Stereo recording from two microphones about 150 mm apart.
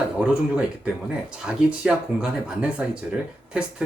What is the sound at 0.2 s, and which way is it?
Speech, 5° right (ahead or behind).